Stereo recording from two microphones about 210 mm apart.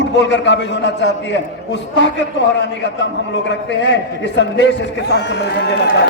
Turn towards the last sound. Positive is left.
turn(degrees=55)  # may be behind; listen again after turning